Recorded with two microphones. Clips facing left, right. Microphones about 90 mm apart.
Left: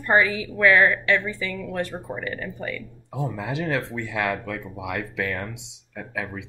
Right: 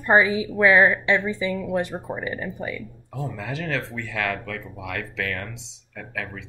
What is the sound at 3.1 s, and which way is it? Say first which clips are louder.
Speech: left 3 dB; 20° left (ahead or behind).